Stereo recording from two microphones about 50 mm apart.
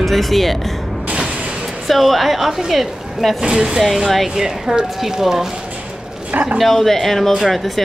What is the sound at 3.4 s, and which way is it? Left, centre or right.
Speech, centre.